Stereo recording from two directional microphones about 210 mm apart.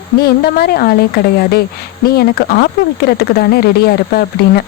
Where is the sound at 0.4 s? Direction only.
50° left (ahead or behind).